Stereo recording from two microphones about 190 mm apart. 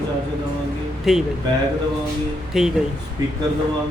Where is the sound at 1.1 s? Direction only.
Centre (ahead or behind).